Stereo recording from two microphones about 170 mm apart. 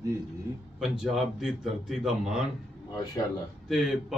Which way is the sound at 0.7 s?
5° right (ahead or behind).